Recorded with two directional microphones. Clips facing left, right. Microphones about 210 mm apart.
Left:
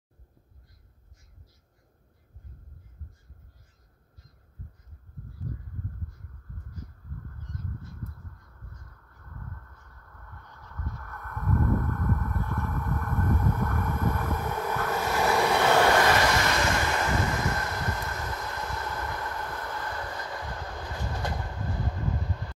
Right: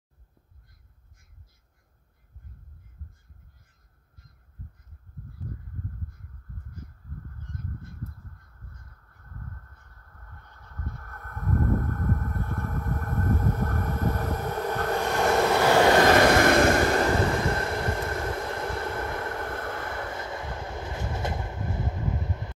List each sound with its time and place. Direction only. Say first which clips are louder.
11.1 s a sound: even; 35° right (ahead or behind)
12.3 s vehicle: even; 45° right (ahead or behind)
15.0 s vehicle: right 2 dB; 5° left (ahead or behind)
16.1 s train: right 6 dB; 55° right (ahead or behind)
17.6 s vehicle: right 5 dB; 30° right (ahead or behind)